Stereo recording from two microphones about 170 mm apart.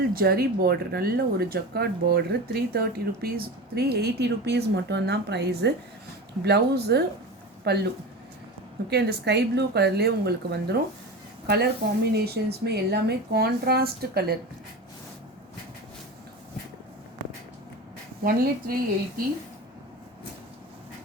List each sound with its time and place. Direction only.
0.1 s speech: 60° right (ahead or behind); by 7.8 s 75° right (ahead or behind)
8.9 s speech: 75° right (ahead or behind)
18.2 s a woman's voice: 60° right (ahead or behind)